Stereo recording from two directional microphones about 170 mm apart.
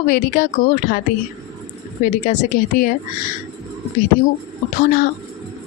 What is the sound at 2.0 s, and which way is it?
Speech, 45° left (ahead or behind).